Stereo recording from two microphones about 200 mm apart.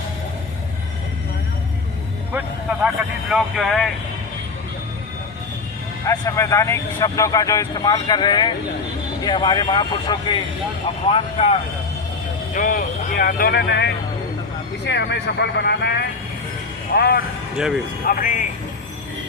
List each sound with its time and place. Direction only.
2.8 s speech: centre (ahead or behind)
6.1 s speech: 15° left (ahead or behind)
12.5 s speech: 40° left (ahead or behind)